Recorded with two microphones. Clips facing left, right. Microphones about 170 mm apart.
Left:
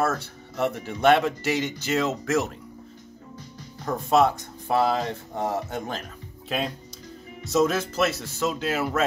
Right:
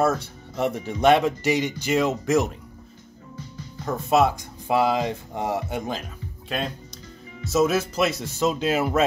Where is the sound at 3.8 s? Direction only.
10° right (ahead or behind).